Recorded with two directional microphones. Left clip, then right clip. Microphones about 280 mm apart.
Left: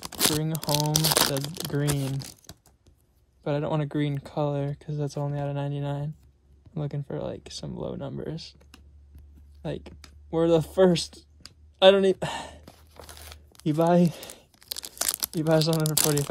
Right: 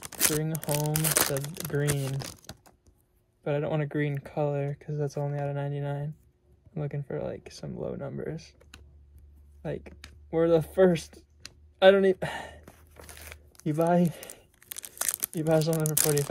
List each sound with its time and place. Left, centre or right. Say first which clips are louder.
0.0 s crumpling: left 3 dB; left
0.4 s speech: left 2 dB; centre
0.7 s speech: left 7 dB; left
3.4 s speech: left 1 dB; centre
9.6 s speech: left 1 dB; centre
12.6 s a sound: left 3 dB; left
13.0 s tearing: left 1 dB; centre